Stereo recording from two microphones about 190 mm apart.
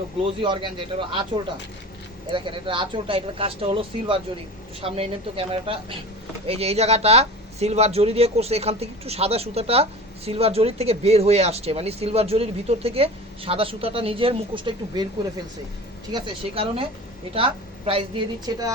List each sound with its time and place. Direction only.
0.3 s speech: 25° right (ahead or behind)
2.3 s speech: 25° right (ahead or behind)
16.1 s a woman's voice: 25° right (ahead or behind)